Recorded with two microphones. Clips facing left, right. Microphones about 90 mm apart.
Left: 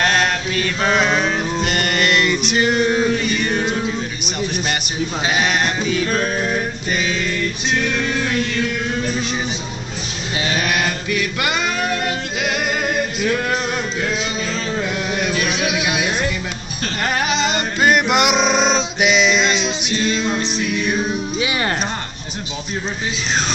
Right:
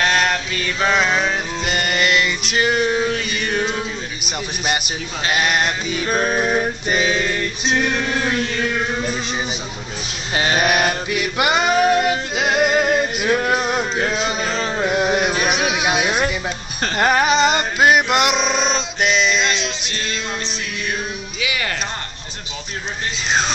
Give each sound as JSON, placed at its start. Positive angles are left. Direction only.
{"t": 0.7, "sound": "music", "side_deg": 0}
{"t": 5.3, "sound": "music", "side_deg": -5}
{"t": 6.2, "sound": "music", "side_deg": -30}
{"t": 10.3, "sound": "music", "side_deg": -40}
{"t": 10.6, "sound": "male singing", "side_deg": -25}
{"t": 13.3, "sound": "music", "side_deg": -20}
{"t": 14.0, "sound": "music", "side_deg": -35}
{"t": 17.7, "sound": "male singing", "side_deg": -5}
{"t": 20.2, "sound": "music", "side_deg": 5}
{"t": 21.4, "sound": "speech", "side_deg": 35}